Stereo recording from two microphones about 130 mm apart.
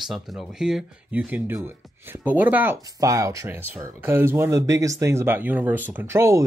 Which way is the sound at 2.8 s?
25° right (ahead or behind).